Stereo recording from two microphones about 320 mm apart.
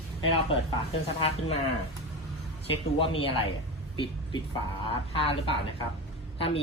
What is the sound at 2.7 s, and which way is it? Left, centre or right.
Speech, centre.